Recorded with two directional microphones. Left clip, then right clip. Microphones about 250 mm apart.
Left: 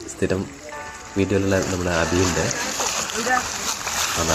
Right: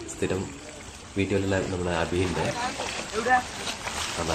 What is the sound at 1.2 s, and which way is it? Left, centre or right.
Speech, centre.